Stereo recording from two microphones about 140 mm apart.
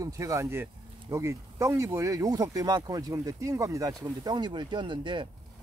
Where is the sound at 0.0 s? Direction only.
25° right (ahead or behind).